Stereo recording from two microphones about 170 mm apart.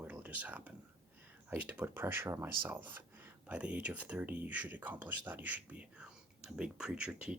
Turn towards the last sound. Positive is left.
turn(degrees=-5)  # may be behind; listen again after turning